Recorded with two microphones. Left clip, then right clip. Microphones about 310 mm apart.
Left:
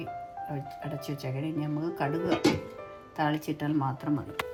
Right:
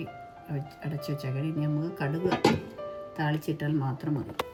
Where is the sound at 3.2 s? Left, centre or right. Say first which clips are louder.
Left 3 dB; centre.